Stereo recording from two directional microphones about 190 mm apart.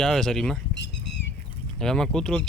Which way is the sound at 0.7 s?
70° left (ahead or behind).